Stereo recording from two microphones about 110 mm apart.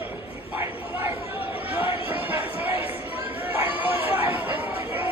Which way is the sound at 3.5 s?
20° right (ahead or behind).